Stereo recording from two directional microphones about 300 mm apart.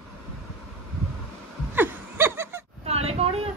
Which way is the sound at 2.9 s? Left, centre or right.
Centre.